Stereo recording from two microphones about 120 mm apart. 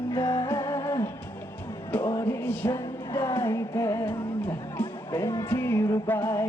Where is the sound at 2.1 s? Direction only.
20° left (ahead or behind).